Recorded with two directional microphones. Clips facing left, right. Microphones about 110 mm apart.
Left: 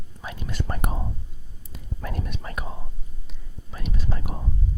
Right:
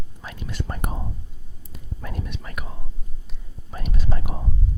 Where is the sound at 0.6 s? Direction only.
60° left (ahead or behind).